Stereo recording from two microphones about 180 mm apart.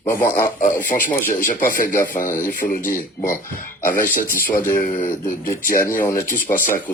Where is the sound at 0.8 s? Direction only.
50° left (ahead or behind).